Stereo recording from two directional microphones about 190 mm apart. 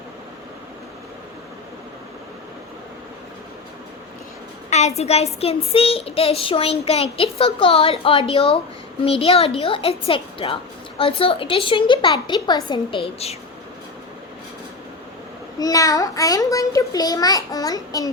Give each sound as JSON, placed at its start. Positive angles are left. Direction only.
{"t": 4.7, "sound": "a woman's voice", "side_deg": 35}
{"t": 15.5, "sound": "speech", "side_deg": 20}